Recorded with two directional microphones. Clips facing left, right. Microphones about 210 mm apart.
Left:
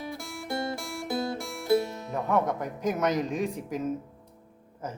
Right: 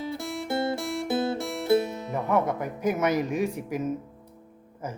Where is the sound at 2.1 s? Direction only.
5° right (ahead or behind).